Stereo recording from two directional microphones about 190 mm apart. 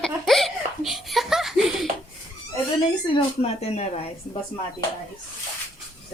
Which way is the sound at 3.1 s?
35° left (ahead or behind).